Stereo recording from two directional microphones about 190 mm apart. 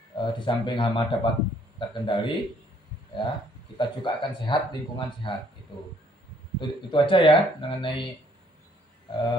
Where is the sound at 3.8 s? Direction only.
25° left (ahead or behind).